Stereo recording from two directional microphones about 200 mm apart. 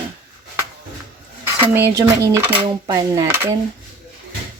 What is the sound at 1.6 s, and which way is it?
Speech, 10° right (ahead or behind).